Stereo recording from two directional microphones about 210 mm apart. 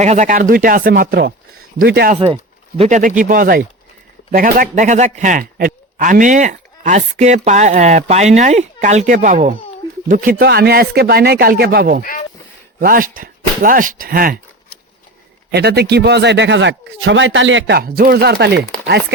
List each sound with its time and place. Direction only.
0.0 s speech: 35° right (ahead or behind)
2.1 s speech: 30° right (ahead or behind); by 14.3 s 45° right (ahead or behind)
15.5 s speech: 50° right (ahead or behind)